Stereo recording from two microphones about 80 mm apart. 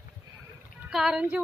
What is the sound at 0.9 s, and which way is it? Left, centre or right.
Speech, centre.